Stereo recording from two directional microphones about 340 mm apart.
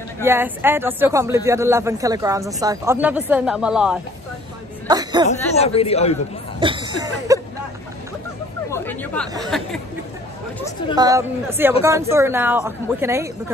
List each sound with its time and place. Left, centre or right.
0.2 s speech: centre
4.8 s a sound: centre
5.6 s a man's voice: centre
6.6 s speech: centre
8.6 s a sound: centre
9.5 s speech: centre
11.0 s speech: centre